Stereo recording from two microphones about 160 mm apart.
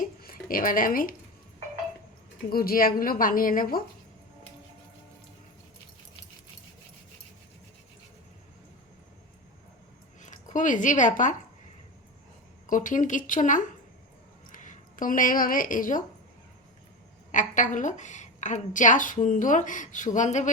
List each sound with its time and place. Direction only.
0.0 s a sound: 65° left (ahead or behind)
2.5 s a woman's voice: 70° left (ahead or behind)
10.2 s speech: 50° left (ahead or behind)
12.6 s a woman's voice: 55° left (ahead or behind)
17.3 s a woman's voice: 50° left (ahead or behind)